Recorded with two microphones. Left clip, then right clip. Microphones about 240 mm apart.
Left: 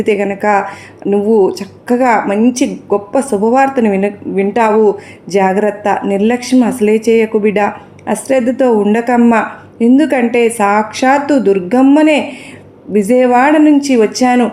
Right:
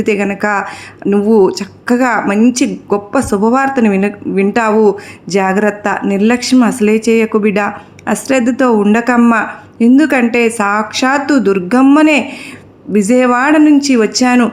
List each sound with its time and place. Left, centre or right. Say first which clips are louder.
0.0 s speech: left 1 dB; right